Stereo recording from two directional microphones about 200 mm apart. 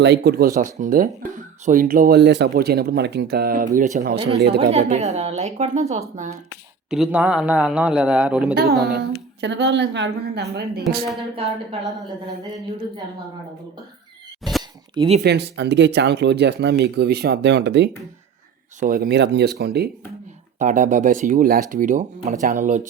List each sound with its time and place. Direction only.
0.0 s speech: 55° right (ahead or behind)
4.4 s speech: 55° right (ahead or behind)
4.7 s speech: 35° right (ahead or behind)
6.9 s a man's voice: 5° right (ahead or behind)
9.0 s speech: 60° right (ahead or behind)
11.3 s a woman's voice: 30° right (ahead or behind)
14.6 s a sound: 25° right (ahead or behind)
15.2 s speech: 55° right (ahead or behind)
18.8 s speech: 45° right (ahead or behind)
20.6 s speech: 40° right (ahead or behind)